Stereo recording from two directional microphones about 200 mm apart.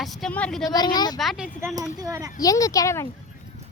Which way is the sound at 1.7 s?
15° right (ahead or behind).